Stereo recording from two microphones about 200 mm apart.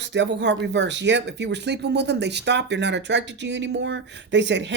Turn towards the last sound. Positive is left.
turn(degrees=-60)  # may be behind; listen again after turning